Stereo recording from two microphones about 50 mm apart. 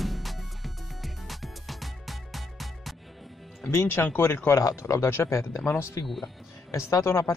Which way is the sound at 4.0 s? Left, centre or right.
Left.